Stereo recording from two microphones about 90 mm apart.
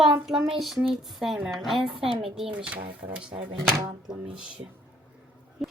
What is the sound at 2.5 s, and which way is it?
Speech, 15° right (ahead or behind).